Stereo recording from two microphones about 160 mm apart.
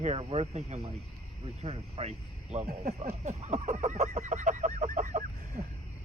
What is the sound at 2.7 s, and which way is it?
Speech, 65° right (ahead or behind).